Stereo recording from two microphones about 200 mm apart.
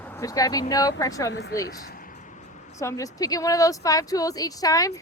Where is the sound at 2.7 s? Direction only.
15° left (ahead or behind).